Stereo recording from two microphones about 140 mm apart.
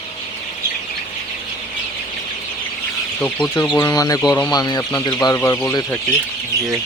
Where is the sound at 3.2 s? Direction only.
10° left (ahead or behind).